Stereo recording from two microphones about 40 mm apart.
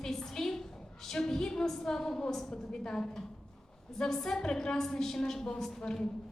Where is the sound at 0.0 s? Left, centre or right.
Centre.